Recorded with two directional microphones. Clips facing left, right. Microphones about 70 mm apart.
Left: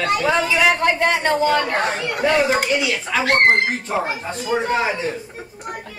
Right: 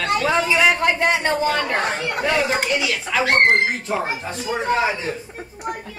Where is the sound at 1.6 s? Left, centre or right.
Right.